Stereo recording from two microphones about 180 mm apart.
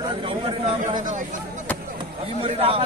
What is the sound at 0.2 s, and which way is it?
Speech, 30° right (ahead or behind).